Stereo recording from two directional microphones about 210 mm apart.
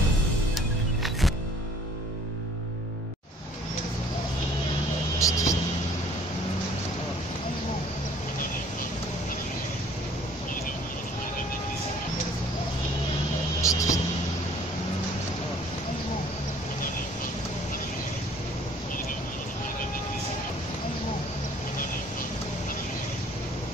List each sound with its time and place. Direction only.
0.6 s music: centre (ahead or behind)
5.2 s vehicle: 15° left (ahead or behind)
13.6 s vehicle: 15° left (ahead or behind)